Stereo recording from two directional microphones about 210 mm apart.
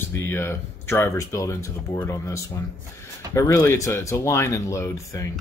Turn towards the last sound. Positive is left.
turn(degrees=15)  # may be behind; listen again after turning